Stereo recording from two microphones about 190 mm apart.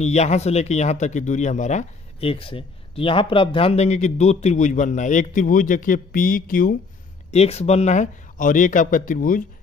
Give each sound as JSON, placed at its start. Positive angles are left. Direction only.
{"t": 0.0, "sound": "speech", "side_deg": 35}
{"t": 7.2, "sound": "speech", "side_deg": 35}